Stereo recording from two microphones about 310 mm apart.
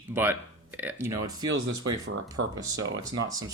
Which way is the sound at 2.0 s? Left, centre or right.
Right.